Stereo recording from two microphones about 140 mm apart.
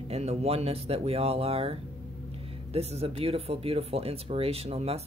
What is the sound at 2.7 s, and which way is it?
Speech, 50° right (ahead or behind).